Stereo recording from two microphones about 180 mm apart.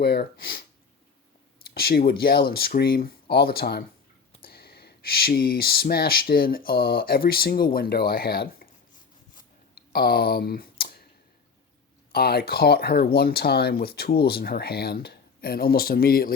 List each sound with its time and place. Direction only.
0.0 s speech: 60° left (ahead or behind)
1.7 s speech: 60° left (ahead or behind)
9.7 s a sound: 60° left (ahead or behind)
12.1 s speech: 60° left (ahead or behind)